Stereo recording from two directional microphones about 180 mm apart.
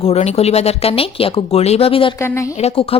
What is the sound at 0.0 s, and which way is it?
Speech, 35° left (ahead or behind).